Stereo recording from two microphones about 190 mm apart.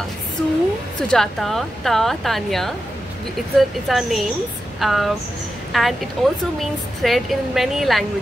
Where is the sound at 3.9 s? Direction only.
Centre (ahead or behind).